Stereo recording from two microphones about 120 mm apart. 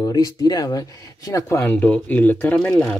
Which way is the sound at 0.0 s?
30° left (ahead or behind).